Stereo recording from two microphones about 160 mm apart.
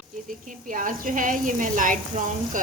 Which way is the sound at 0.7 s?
55° right (ahead or behind).